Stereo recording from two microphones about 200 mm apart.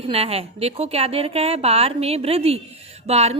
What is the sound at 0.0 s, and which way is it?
A woman's voice, 30° right (ahead or behind).